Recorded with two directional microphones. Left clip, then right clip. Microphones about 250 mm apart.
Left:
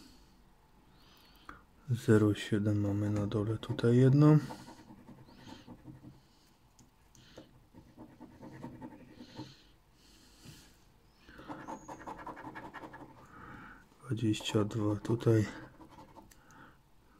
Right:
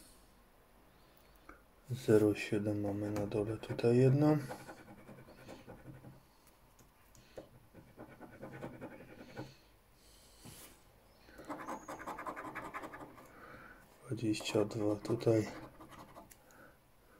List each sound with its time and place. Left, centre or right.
1.5 s speech: left
9.3 s a sound: left
14.0 s speech: left